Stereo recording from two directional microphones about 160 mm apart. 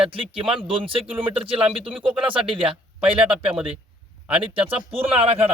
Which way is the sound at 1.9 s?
5° right (ahead or behind).